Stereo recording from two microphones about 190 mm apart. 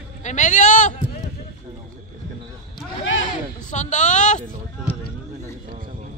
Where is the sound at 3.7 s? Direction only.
40° left (ahead or behind).